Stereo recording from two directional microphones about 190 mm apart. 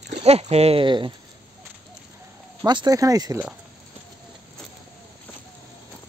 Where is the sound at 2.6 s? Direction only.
20° right (ahead or behind).